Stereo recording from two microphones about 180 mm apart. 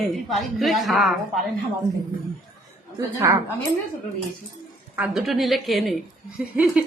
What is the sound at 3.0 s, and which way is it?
Speech, 15° right (ahead or behind).